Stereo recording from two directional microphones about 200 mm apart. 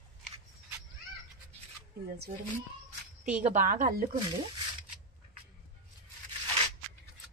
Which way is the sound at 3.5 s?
40° right (ahead or behind).